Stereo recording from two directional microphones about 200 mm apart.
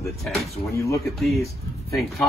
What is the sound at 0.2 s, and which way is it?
Speech, centre (ahead or behind).